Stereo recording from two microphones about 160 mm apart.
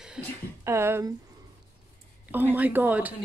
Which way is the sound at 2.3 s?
10° right (ahead or behind).